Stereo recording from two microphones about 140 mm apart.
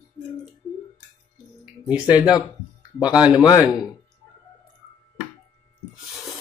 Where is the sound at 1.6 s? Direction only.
5° right (ahead or behind).